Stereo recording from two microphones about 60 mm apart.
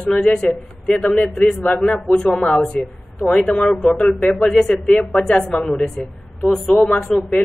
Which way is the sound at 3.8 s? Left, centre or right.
Centre.